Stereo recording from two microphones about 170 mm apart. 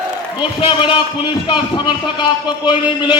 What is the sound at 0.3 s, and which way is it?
A man's voice, 30° left (ahead or behind).